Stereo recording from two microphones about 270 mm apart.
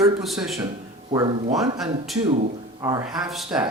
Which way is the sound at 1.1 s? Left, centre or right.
Centre.